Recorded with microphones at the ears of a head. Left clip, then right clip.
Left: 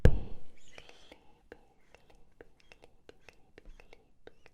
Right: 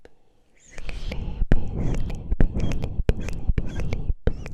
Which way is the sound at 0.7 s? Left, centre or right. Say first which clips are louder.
Right 15 dB; right.